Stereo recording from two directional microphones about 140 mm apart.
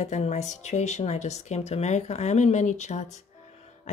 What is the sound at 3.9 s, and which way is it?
Music, 55° left (ahead or behind).